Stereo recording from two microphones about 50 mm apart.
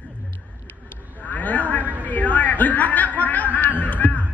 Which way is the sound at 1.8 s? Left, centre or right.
Right.